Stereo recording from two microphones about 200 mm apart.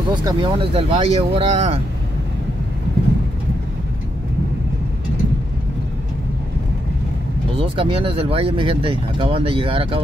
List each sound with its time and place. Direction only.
0.1 s speech: 25° right (ahead or behind)
7.5 s speech: 25° right (ahead or behind)